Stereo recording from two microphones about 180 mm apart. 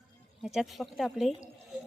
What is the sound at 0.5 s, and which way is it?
Speech, centre (ahead or behind).